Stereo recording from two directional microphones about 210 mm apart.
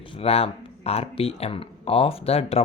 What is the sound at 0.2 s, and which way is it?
Speech, 30° left (ahead or behind).